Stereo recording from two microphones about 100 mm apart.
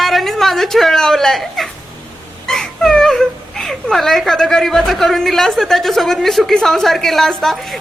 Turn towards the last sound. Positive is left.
turn(degrees=5)  # may be behind; listen again after turning